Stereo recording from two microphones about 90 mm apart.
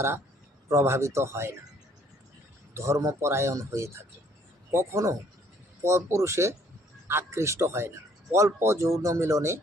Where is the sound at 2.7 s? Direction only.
35° right (ahead or behind).